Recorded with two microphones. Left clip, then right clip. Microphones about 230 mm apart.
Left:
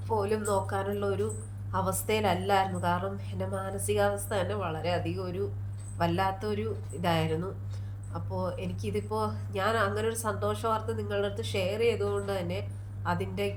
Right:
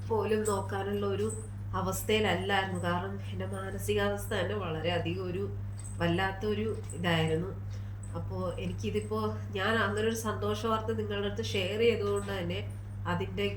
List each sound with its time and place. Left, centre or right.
0.1 s a woman's voice: centre
8.3 s a woman's voice: centre